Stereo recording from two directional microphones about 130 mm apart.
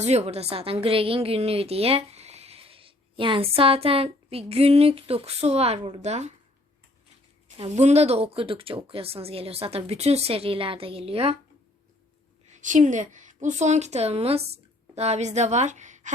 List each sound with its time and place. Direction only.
0.0 s a woman's voice: 55° right (ahead or behind)
7.5 s a woman's voice: 55° right (ahead or behind)
12.5 s a woman's voice: 70° right (ahead or behind)